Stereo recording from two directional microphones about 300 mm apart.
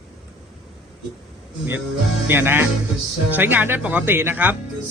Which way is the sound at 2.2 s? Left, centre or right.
Centre.